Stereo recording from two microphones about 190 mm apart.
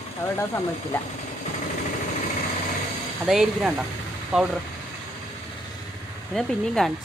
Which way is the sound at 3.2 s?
Centre (ahead or behind).